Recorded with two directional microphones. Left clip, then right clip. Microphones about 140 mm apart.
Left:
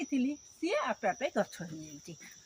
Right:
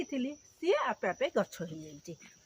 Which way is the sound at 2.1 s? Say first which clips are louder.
Right 3 dB; 55° right (ahead or behind).